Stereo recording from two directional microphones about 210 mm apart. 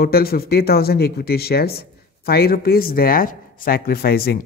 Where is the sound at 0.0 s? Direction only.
45° left (ahead or behind).